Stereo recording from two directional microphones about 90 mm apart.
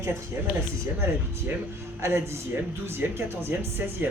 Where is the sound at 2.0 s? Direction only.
30° right (ahead or behind).